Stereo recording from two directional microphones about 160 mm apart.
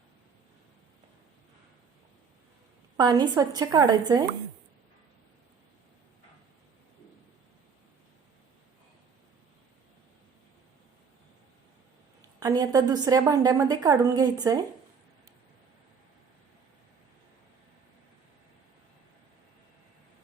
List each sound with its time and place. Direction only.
3.0 s a woman's voice: 25° right (ahead or behind)
12.4 s a woman's voice: 25° right (ahead or behind)